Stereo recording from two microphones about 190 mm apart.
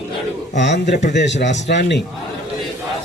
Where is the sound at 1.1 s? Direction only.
65° left (ahead or behind).